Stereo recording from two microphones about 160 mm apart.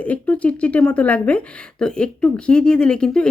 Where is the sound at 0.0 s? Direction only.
10° left (ahead or behind).